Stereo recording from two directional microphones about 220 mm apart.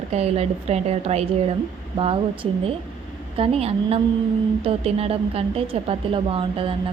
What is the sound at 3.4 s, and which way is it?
A woman's voice, 25° right (ahead or behind).